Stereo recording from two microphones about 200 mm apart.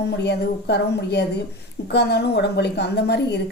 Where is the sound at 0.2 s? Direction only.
55° left (ahead or behind).